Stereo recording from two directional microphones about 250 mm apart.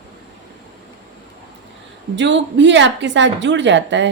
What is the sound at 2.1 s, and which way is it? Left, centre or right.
A woman's voice, right.